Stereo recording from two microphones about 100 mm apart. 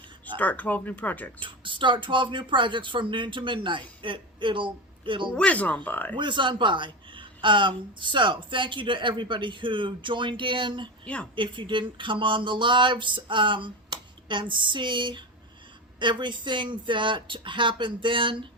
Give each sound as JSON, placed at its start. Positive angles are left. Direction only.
{"t": 0.3, "sound": "speech", "side_deg": 15}
{"t": 1.4, "sound": "speech", "side_deg": -55}
{"t": 5.4, "sound": "speech", "side_deg": 15}
{"t": 6.1, "sound": "speech", "side_deg": -50}
{"t": 11.0, "sound": "a woman's voice", "side_deg": 10}
{"t": 11.3, "sound": "speech", "side_deg": -55}